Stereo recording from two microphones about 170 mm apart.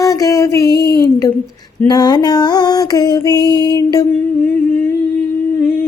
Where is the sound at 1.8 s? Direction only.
25° left (ahead or behind).